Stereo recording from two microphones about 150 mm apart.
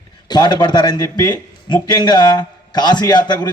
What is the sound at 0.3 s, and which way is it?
A man's voice, 30° left (ahead or behind).